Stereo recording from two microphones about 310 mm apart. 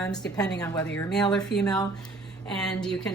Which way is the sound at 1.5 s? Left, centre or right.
Left.